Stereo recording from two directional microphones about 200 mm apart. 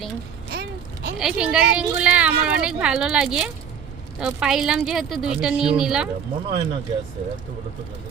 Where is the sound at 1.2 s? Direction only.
5° right (ahead or behind).